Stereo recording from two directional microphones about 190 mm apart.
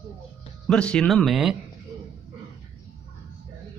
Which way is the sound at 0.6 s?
5° left (ahead or behind).